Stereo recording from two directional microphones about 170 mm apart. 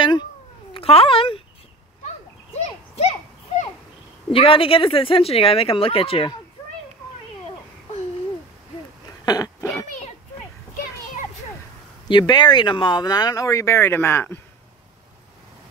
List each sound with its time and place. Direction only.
0.0 s cat: 25° left (ahead or behind)
0.7 s a child's voice: 35° left (ahead or behind)
2.6 s a sound: 40° left (ahead or behind)
4.3 s speech: 30° left (ahead or behind)
9.2 s cough: 20° left (ahead or behind)
12.1 s speech: 25° left (ahead or behind)